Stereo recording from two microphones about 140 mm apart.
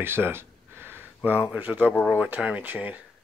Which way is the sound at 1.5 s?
10° right (ahead or behind).